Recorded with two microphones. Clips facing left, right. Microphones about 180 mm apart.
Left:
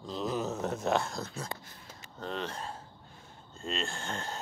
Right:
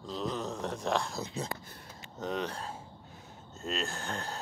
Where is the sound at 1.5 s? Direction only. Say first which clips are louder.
Right 1 dB; 25° left (ahead or behind).